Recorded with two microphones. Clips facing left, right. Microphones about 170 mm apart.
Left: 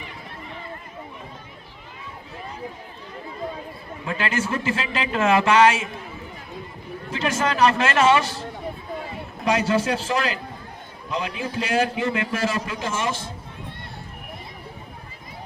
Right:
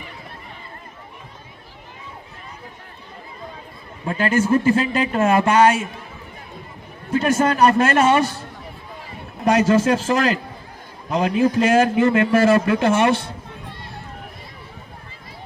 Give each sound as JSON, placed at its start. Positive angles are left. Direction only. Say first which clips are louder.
{"t": 4.0, "sound": "a man's voice", "louder": "right 6 dB", "side_deg": -40}
{"t": 7.1, "sound": "a man's voice", "louder": "right 6 dB", "side_deg": -50}
{"t": 9.4, "sound": "a man's voice", "louder": "right 5 dB", "side_deg": -45}